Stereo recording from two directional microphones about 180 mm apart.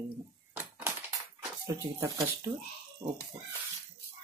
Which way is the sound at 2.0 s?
15° right (ahead or behind).